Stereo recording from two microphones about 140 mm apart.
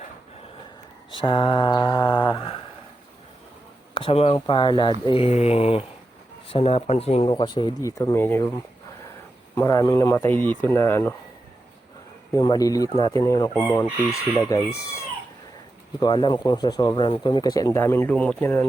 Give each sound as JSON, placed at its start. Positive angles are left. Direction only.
{"t": 1.1, "sound": "speech", "side_deg": 35}
{"t": 3.9, "sound": "speech", "side_deg": 40}
{"t": 7.3, "sound": "speech", "side_deg": 35}
{"t": 9.6, "sound": "speech", "side_deg": 25}
{"t": 12.3, "sound": "speech", "side_deg": 25}
{"t": 16.0, "sound": "speech", "side_deg": 30}